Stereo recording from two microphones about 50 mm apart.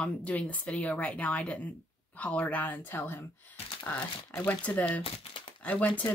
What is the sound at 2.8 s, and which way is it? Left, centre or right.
Speech, left.